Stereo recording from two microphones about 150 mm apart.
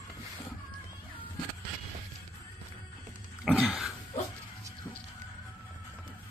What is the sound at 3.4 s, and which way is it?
Throat clearing, 5° right (ahead or behind).